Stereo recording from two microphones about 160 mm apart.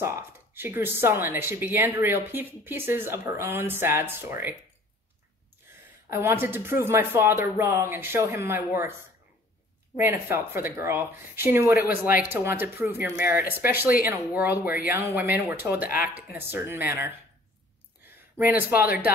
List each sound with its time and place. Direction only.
0.0 s speech: 15° right (ahead or behind)
6.0 s speech: 15° right (ahead or behind)
9.9 s speech: 15° right (ahead or behind)
11.9 s speech: 60° left (ahead or behind)
12.3 s speech: 15° right (ahead or behind)
18.4 s speech: 10° right (ahead or behind)